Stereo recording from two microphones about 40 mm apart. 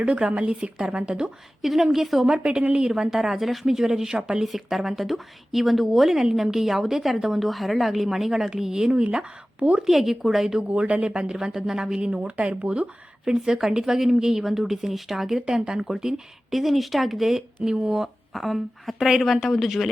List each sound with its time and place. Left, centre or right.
0.0 s a woman's voice: right
1.6 s speech: centre
2.3 s a woman's voice: right
4.4 s a woman's voice: centre
10.6 s a woman's voice: right
11.3 s a woman's voice: centre
12.2 s speech: right
13.2 s a woman's voice: centre
16.5 s speech: centre
17.7 s a woman's voice: centre
18.3 s speech: centre